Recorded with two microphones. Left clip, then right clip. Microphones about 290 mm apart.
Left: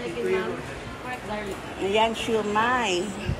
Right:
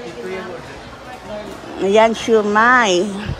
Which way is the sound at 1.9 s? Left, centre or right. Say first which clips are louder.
Right 10 dB; right.